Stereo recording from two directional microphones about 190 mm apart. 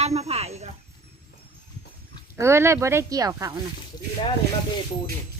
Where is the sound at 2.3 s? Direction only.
15° right (ahead or behind).